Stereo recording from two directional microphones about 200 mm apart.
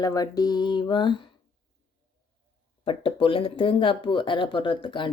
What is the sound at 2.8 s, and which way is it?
Speech, 25° left (ahead or behind).